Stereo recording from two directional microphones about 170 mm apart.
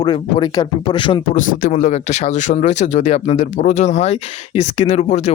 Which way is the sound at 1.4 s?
50° left (ahead or behind).